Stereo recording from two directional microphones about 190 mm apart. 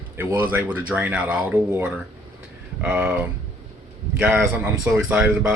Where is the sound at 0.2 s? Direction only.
10° right (ahead or behind).